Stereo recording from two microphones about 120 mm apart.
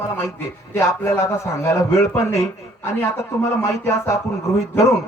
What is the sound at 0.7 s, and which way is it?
A man's voice, 20° left (ahead or behind).